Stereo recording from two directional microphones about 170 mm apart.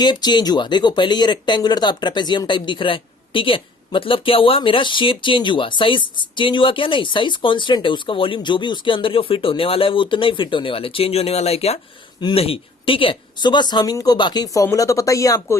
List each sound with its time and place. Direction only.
0.0 s speech: 25° left (ahead or behind)